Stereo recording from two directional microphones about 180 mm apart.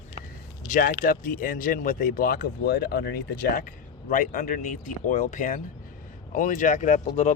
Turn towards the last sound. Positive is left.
turn(degrees=45)  # may be behind; listen again after turning